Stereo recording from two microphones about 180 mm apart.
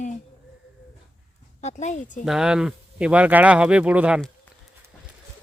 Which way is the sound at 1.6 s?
40° left (ahead or behind).